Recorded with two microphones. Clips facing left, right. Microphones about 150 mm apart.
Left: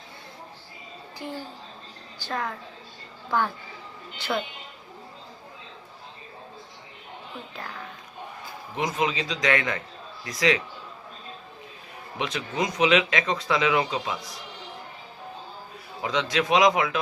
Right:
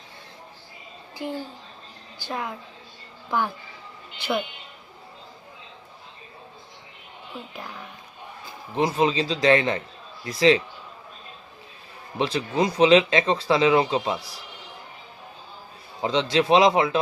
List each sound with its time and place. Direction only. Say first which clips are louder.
2.2 s a woman's voice: even; 15° right (ahead or behind)
7.5 s a woman's voice: even; 15° right (ahead or behind)
8.7 s speech: right 5 dB; 30° right (ahead or behind)
12.1 s speech: right 5 dB; 35° right (ahead or behind)
16.0 s speech: right 4 dB; 30° right (ahead or behind)